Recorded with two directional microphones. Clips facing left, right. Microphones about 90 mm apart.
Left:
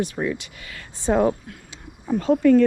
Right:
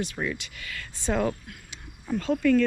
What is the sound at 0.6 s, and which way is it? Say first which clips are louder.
Speech: even; 25° left (ahead or behind).